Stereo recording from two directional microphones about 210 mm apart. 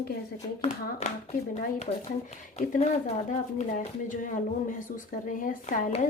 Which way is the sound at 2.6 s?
40° left (ahead or behind).